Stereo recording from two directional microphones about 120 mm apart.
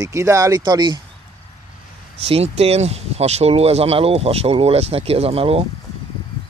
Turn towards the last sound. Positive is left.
turn(degrees=-55)  # may be behind; listen again after turning